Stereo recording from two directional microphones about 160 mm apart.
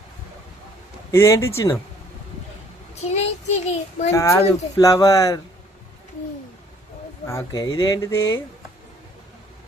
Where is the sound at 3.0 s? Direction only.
45° left (ahead or behind).